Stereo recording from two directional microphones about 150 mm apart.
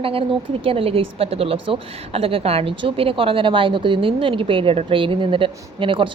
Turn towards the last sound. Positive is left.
turn(degrees=-35)  # may be behind; listen again after turning